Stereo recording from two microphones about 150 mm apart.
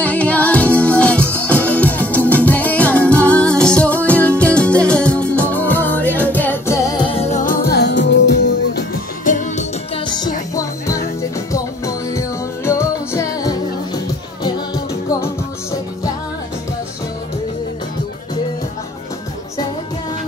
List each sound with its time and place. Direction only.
0.0 s music: 10° left (ahead or behind)
7.1 s music: 45° left (ahead or behind)
7.4 s music: 80° left
8.7 s music: 60° left (ahead or behind)
10.0 s music: 30° left (ahead or behind)